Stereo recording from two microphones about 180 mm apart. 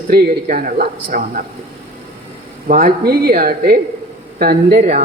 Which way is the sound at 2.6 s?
50° right (ahead or behind).